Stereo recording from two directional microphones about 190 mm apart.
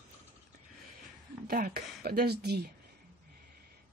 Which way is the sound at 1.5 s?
50° right (ahead or behind).